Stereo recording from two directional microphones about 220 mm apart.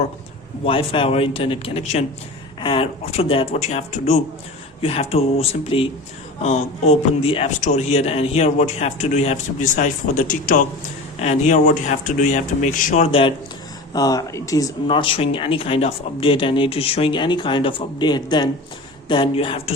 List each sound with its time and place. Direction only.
0.6 s a man's voice: 25° left (ahead or behind)